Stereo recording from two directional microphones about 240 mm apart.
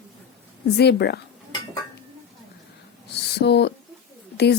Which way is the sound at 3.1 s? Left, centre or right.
Left.